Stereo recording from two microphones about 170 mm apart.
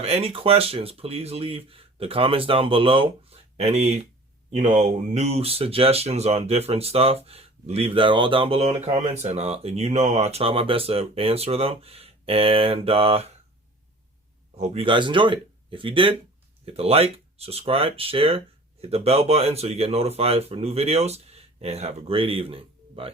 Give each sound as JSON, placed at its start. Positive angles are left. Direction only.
{"t": 0.0, "sound": "speech", "side_deg": -35}
{"t": 14.5, "sound": "speech", "side_deg": -40}